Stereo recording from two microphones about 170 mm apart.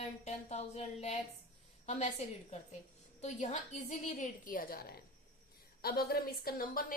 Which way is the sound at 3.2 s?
40° left (ahead or behind).